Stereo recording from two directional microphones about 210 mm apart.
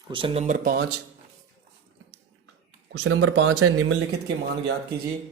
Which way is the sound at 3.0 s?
65° right (ahead or behind).